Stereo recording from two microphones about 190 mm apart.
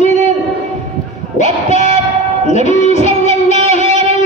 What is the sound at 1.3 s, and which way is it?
Music, 40° left (ahead or behind).